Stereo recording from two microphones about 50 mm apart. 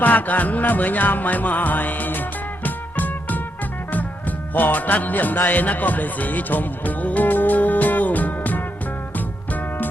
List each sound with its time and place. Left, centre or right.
0.0 s music: left
4.5 s music: left